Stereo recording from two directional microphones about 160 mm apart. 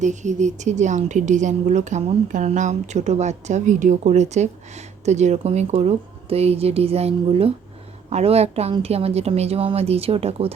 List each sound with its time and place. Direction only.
0.0 s a woman's voice: 50° right (ahead or behind)